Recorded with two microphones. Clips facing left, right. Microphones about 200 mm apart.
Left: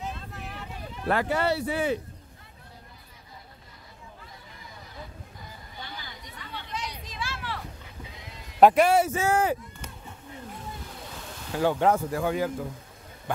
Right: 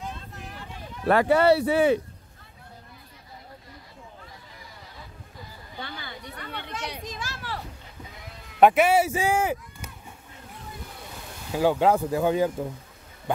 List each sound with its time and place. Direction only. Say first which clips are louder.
1.0 s speech: right 7 dB; 70° right (ahead or behind)
5.8 s speech: right 5 dB; 60° right (ahead or behind)
7.1 s a sound: even; 45° right (ahead or behind)
8.5 s speech: even; 5° right (ahead or behind)
11.5 s speech: right 2 dB; 10° right (ahead or behind)